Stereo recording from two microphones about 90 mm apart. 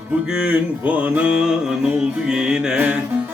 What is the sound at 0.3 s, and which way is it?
Music, 15° right (ahead or behind).